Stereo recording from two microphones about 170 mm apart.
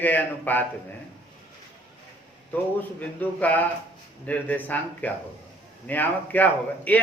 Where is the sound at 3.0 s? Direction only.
10° left (ahead or behind).